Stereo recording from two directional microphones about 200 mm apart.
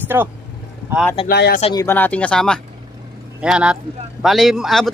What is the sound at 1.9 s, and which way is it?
Speech, 10° left (ahead or behind).